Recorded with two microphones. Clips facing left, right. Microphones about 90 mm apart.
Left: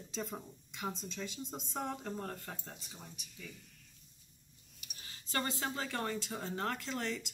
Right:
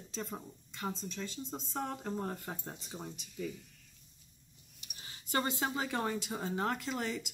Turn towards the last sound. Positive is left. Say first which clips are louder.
# right 2 dB
turn(degrees=-10)  # may be behind; listen again after turning